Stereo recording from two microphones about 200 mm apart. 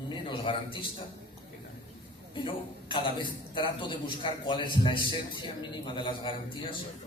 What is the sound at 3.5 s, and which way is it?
A man's voice, 25° left (ahead or behind).